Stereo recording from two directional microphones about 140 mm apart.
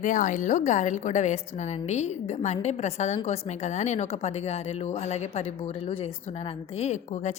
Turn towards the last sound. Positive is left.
turn(degrees=60)  # may be behind; listen again after turning